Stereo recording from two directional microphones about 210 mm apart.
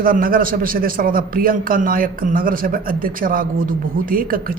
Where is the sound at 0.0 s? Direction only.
45° right (ahead or behind).